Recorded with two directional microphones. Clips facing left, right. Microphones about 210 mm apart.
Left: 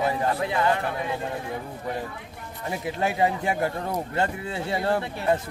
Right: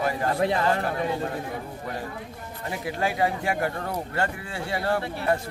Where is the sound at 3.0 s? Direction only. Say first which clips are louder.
Left 1 dB; 20° left (ahead or behind).